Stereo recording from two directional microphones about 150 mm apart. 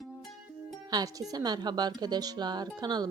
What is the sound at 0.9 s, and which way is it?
Speech, 25° right (ahead or behind).